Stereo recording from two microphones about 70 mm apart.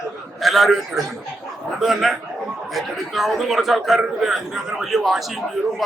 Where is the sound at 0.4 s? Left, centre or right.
Centre.